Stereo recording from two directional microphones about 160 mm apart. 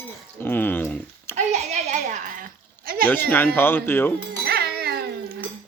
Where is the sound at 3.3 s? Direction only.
15° left (ahead or behind).